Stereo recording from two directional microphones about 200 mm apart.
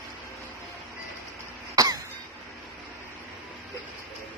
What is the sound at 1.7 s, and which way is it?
Cough, 20° right (ahead or behind).